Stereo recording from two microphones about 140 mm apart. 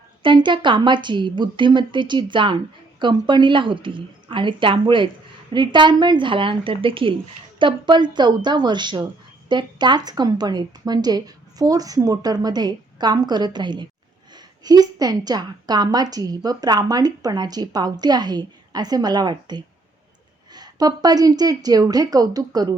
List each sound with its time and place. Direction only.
0.2 s a woman's voice: 35° right (ahead or behind)